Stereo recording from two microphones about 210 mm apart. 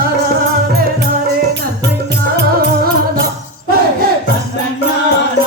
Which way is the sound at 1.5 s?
55° right (ahead or behind).